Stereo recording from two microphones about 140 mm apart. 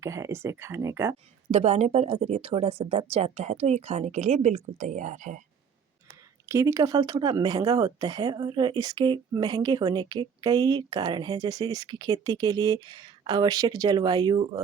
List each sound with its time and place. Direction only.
0.0 s speech: 20° right (ahead or behind)
1.5 s a woman's voice: 50° right (ahead or behind)
6.4 s speech: 20° right (ahead or behind)